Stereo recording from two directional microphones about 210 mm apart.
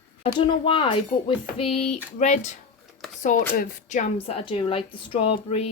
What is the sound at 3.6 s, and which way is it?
Speech, 35° left (ahead or behind).